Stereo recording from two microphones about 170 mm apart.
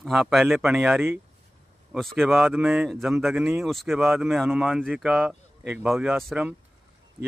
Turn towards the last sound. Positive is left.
turn(degrees=-5)  # may be behind; listen again after turning